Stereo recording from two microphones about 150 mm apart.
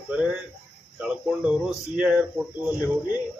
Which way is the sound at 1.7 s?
5° right (ahead or behind).